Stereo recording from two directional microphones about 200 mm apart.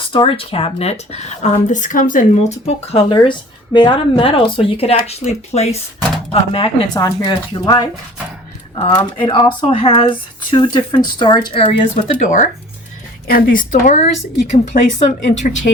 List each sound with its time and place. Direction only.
0.1 s speech: 25° left (ahead or behind)
2.6 s speech: 25° left (ahead or behind)
12.2 s speech: 40° left (ahead or behind)